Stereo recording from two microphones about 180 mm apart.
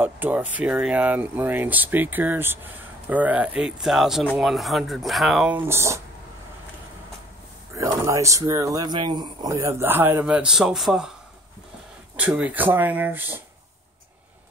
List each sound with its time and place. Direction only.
0.0 s speech: 10° right (ahead or behind)
7.7 s speech: 15° right (ahead or behind)
12.2 s speech: 10° right (ahead or behind)